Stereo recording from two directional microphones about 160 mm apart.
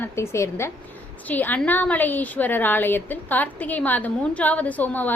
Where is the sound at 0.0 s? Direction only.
15° left (ahead or behind).